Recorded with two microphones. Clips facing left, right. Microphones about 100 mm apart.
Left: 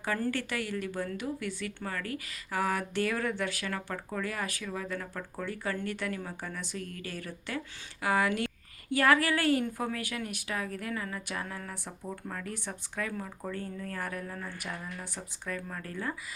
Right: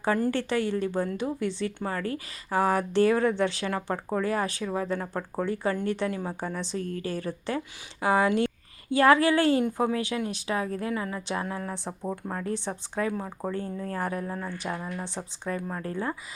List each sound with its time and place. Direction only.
0.3 s a woman's voice: 30° right (ahead or behind)